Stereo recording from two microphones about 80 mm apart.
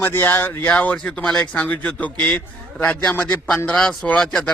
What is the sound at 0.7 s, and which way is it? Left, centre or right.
Speech, centre.